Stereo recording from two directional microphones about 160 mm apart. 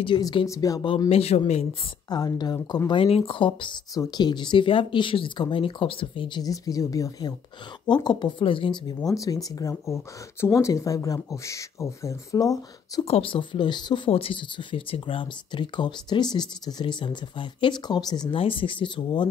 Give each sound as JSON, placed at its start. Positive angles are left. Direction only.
{"t": 0.0, "sound": "speech", "side_deg": 30}
{"t": 1.0, "sound": "speech", "side_deg": 40}
{"t": 2.0, "sound": "speech", "side_deg": 25}
{"t": 13.0, "sound": "speech", "side_deg": 35}